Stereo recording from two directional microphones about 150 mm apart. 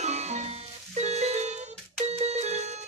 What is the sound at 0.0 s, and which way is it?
Music, 45° right (ahead or behind).